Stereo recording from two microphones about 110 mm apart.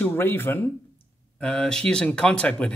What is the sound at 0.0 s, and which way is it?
Speech, 20° left (ahead or behind).